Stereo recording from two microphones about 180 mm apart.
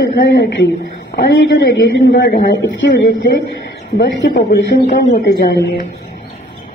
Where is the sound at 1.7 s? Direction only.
85° left.